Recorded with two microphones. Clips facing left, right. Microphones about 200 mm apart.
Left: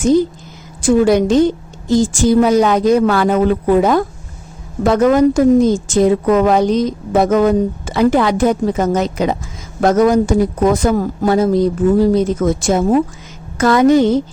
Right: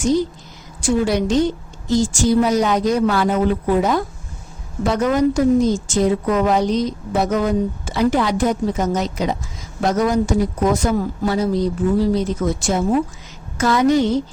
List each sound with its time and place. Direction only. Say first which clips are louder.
1.0 s a woman's voice: left 6 dB; 50° left (ahead or behind)
13.6 s a woman's voice: left 5 dB; 50° left (ahead or behind)